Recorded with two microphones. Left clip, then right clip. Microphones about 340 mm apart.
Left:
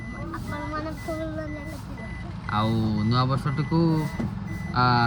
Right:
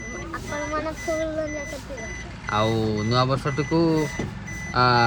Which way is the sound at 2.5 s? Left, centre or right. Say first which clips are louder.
Right 4 dB; right.